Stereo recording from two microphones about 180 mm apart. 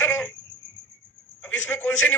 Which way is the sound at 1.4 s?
10° left (ahead or behind).